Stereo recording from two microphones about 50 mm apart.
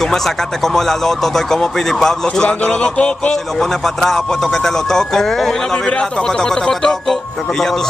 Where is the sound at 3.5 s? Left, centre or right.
Centre.